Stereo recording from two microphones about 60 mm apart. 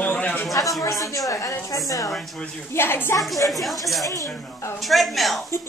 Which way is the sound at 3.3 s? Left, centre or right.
Left.